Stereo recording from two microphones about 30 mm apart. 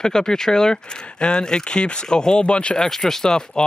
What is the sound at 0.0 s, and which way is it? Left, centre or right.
Speech, left.